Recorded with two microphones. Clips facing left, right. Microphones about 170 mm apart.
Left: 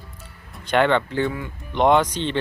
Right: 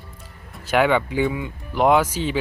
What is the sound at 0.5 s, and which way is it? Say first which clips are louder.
Speech: even; 5° right (ahead or behind).